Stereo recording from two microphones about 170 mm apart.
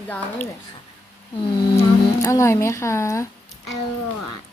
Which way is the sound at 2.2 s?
15° left (ahead or behind).